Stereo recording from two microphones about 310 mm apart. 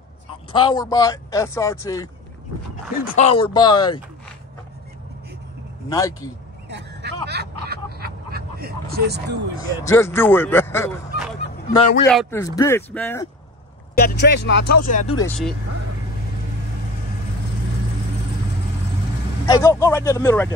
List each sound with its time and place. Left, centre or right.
0.5 s speech: centre
3.1 s speech: left
5.9 s speech: centre
6.7 s a sound: right
9.8 s speech: centre
11.7 s speech: left
12.1 s speech: centre
13.9 s speech: left
14.9 s speech: left
15.1 s speech: centre
19.4 s speech: centre